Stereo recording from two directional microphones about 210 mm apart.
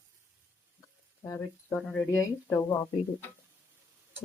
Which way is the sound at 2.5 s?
15° left (ahead or behind).